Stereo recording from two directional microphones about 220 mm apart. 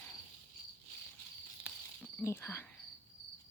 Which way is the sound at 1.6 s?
10° left (ahead or behind).